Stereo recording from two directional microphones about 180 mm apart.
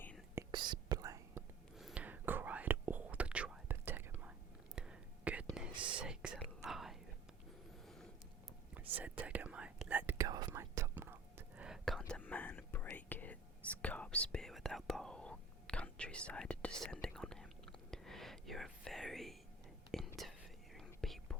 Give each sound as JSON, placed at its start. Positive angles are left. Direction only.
{"t": 0.5, "sound": "whispering", "side_deg": -25}
{"t": 1.7, "sound": "whispering", "side_deg": -5}
{"t": 5.7, "sound": "whispering", "side_deg": -25}
{"t": 6.0, "sound": "whispering", "side_deg": -5}
{"t": 9.2, "sound": "whispering", "side_deg": -5}
{"t": 10.2, "sound": "whispering", "side_deg": -20}